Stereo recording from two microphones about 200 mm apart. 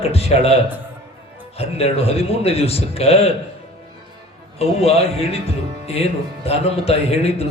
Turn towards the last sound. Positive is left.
turn(degrees=30)  # may be behind; listen again after turning